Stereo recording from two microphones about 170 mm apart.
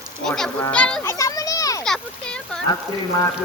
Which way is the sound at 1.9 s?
5° left (ahead or behind).